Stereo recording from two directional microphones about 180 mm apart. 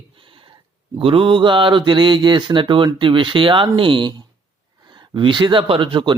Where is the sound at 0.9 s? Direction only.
30° right (ahead or behind).